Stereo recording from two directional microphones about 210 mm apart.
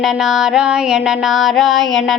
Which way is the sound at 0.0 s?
Centre (ahead or behind).